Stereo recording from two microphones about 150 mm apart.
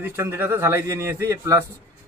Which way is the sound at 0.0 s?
15° right (ahead or behind).